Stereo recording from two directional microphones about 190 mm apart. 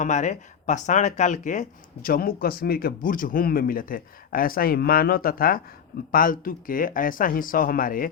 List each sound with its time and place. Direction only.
0.0 s speech: 40° left (ahead or behind)